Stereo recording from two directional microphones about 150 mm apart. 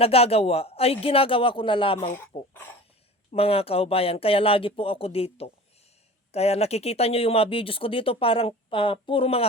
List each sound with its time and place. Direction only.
0.0 s speech: 40° left (ahead or behind)
3.3 s speech: 40° left (ahead or behind)